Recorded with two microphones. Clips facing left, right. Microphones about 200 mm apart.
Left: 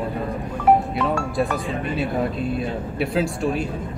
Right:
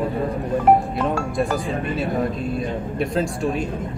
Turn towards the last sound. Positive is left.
turn(degrees=5)  # may be behind; listen again after turning